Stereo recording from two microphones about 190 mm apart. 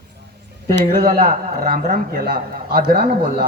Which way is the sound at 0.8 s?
50° right (ahead or behind).